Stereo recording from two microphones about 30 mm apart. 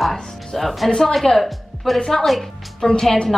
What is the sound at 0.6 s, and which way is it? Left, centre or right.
Speech, centre.